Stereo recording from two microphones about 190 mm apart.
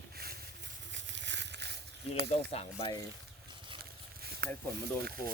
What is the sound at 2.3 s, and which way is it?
Speech, 30° left (ahead or behind).